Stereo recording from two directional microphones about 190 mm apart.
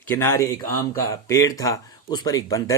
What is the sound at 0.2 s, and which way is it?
A man's voice, 15° left (ahead or behind).